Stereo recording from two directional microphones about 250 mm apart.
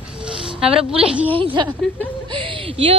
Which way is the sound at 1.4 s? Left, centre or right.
Centre.